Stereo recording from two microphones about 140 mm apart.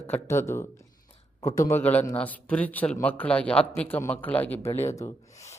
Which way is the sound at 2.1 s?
10° left (ahead or behind).